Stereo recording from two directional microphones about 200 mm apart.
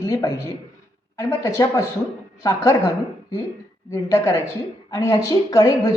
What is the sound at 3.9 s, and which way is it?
A woman's voice, 15° left (ahead or behind).